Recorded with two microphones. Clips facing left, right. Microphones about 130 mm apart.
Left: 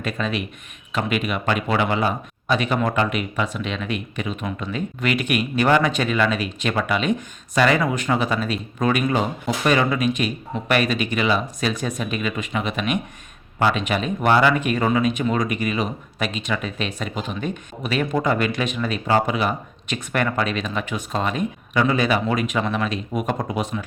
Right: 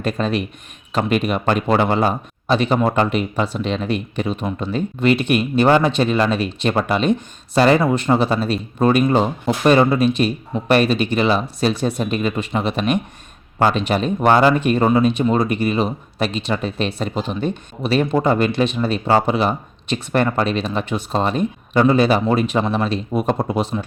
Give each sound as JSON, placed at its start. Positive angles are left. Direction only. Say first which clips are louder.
{"t": 0.0, "sound": "speech", "louder": "right 5 dB", "side_deg": -35}